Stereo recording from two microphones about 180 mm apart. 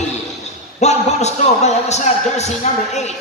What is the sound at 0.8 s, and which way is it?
A man's voice, 40° left (ahead or behind).